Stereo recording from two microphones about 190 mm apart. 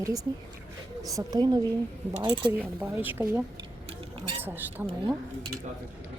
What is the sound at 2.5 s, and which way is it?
Speech, 10° right (ahead or behind).